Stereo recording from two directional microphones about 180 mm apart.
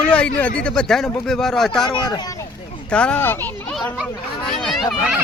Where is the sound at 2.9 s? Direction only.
5° left (ahead or behind).